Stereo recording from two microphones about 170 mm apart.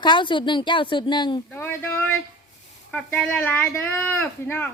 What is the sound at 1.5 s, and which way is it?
Speech, 15° left (ahead or behind).